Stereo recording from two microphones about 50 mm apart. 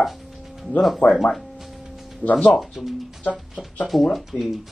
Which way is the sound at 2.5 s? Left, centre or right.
Centre.